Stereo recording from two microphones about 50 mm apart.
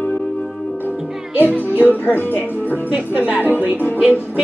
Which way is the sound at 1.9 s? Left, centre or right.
Left.